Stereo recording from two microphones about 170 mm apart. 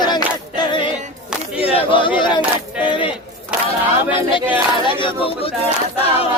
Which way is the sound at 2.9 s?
30° left (ahead or behind).